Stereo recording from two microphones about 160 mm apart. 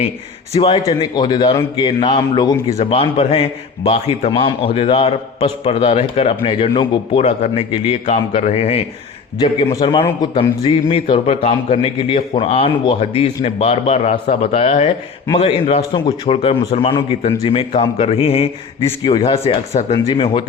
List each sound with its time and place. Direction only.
0.5 s a man's voice: 40° left (ahead or behind)
1.1 s a man's voice: 25° left (ahead or behind)
2.7 s a man's voice: 40° left (ahead or behind)
9.4 s a man's voice: 25° left (ahead or behind)